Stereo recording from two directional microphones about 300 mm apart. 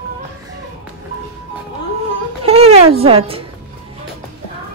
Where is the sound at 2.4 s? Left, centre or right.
Centre.